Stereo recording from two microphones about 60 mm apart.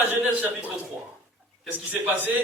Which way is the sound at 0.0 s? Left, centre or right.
Right.